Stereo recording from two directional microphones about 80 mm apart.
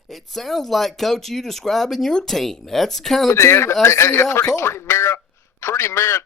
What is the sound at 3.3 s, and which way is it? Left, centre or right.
A man's voice, left.